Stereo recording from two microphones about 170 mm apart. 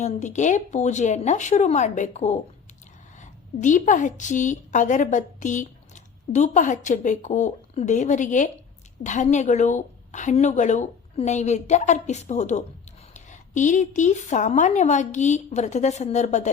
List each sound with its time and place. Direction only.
0.0 s a woman's voice: 45° left (ahead or behind)